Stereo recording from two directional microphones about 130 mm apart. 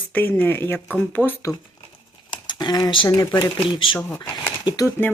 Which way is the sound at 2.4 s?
30° left (ahead or behind).